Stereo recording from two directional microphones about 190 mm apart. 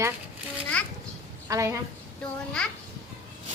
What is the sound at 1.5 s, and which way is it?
Speech, 15° right (ahead or behind).